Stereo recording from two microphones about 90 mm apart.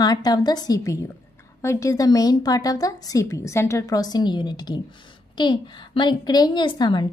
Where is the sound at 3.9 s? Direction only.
50° left (ahead or behind).